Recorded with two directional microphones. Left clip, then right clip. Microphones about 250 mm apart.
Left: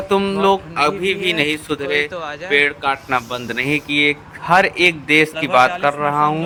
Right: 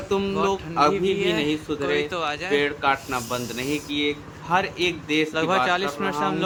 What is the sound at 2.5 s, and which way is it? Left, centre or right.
Speech, centre.